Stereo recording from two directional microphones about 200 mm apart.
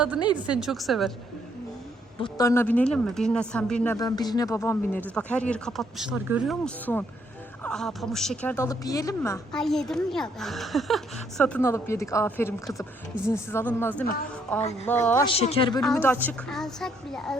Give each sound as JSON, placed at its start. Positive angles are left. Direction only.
{"t": 0.4, "sound": "a woman's voice", "side_deg": -5}
{"t": 2.2, "sound": "a woman's voice", "side_deg": 15}
{"t": 3.9, "sound": "speech", "side_deg": 20}
{"t": 9.5, "sound": "a woman's voice", "side_deg": 0}
{"t": 15.2, "sound": "speech", "side_deg": 30}
{"t": 15.8, "sound": "a woman's voice", "side_deg": 5}